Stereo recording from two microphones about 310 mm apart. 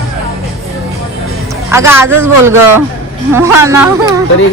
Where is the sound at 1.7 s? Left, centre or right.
Centre.